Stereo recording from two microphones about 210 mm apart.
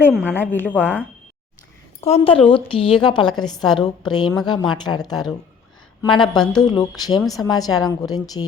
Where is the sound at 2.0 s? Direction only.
30° left (ahead or behind).